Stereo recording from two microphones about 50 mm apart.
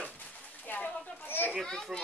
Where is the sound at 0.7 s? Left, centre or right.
Left.